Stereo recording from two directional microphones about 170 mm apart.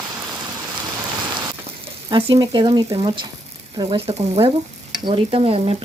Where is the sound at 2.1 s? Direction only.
25° right (ahead or behind).